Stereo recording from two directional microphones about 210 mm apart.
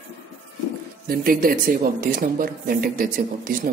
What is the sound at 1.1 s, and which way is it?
Speech, 45° right (ahead or behind).